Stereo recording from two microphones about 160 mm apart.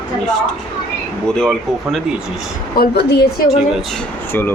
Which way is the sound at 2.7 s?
80° left.